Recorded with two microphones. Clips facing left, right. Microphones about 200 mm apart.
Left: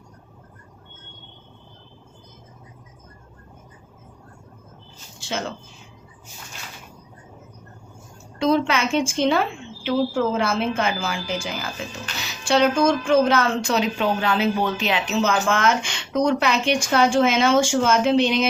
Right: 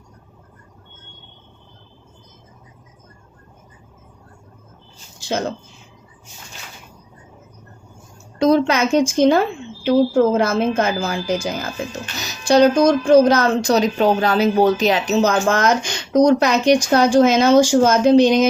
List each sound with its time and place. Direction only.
5.3 s speech: 40° right (ahead or behind)
8.4 s speech: 40° right (ahead or behind)